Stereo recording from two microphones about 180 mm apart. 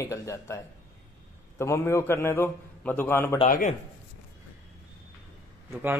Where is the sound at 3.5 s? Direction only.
50° left (ahead or behind).